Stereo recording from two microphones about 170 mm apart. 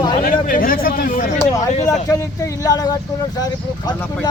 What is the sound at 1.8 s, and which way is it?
Speech, 20° left (ahead or behind).